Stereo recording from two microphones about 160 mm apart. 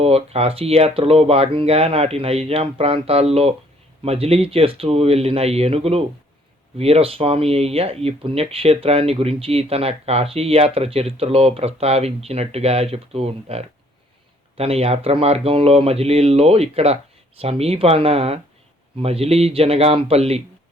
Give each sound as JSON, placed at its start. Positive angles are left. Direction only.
{"t": 0.0, "sound": "speech", "side_deg": -40}